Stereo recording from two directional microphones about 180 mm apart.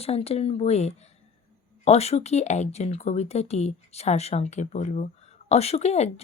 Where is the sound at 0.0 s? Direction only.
35° left (ahead or behind).